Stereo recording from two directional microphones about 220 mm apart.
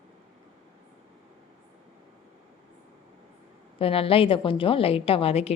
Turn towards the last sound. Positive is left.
turn(degrees=25)  # may be behind; listen again after turning